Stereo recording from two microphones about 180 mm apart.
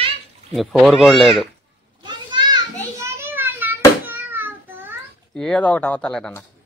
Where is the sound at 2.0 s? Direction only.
25° right (ahead or behind).